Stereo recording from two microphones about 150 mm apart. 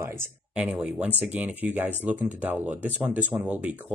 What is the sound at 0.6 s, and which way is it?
Speech, 5° right (ahead or behind).